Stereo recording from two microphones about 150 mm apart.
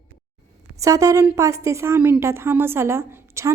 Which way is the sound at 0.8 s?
20° right (ahead or behind).